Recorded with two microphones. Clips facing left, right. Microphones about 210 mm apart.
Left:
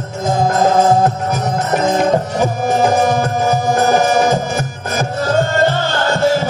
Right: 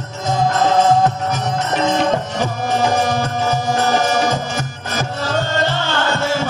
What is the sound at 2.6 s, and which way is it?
Music, 50° left (ahead or behind).